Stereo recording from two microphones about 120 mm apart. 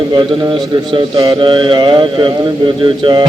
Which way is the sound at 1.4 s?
45° right (ahead or behind).